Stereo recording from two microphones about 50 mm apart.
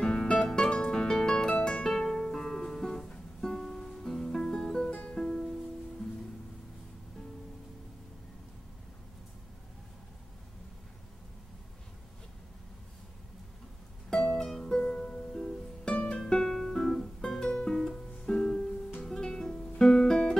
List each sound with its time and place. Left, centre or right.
0.0 s music: centre
14.4 s music: centre
14.8 s music: left